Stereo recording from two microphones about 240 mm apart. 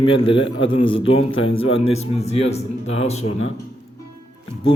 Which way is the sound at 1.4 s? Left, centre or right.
Left.